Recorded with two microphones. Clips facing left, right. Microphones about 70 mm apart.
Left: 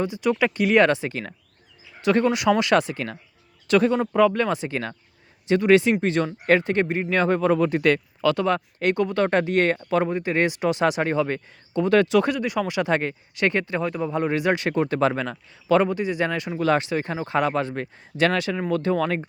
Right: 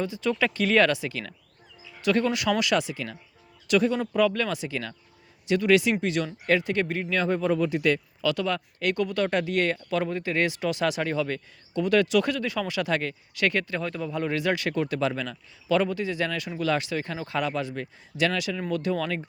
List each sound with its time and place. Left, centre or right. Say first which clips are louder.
0.0 s speech: left 4 dB; left
0.9 s speech: left 4 dB; left
2.7 s speech: left 5 dB; left
3.9 s speech: left 5 dB; left
6.8 s speech: left 4 dB; left
7.1 s speech: left 5 dB; left
8.4 s speech: left 5 dB; left
17.4 s speech: left 5 dB; left